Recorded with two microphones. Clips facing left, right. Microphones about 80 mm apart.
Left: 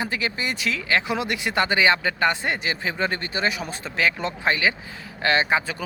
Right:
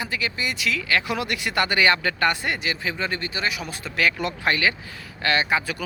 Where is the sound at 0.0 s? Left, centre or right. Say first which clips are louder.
Left 1 dB; left.